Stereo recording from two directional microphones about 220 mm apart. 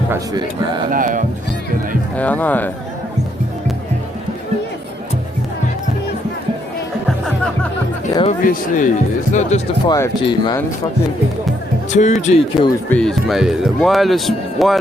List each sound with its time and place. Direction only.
0.1 s speech: 20° right (ahead or behind)
0.9 s speech: 40° right (ahead or behind)
2.1 s speech: 5° left (ahead or behind)
8.1 s speech: 25° left (ahead or behind)
8.4 s speech: 35° left (ahead or behind)
9.8 s speech: 20° left (ahead or behind)
11.9 s speech: 30° left (ahead or behind)
12.9 s speech: 5° left (ahead or behind)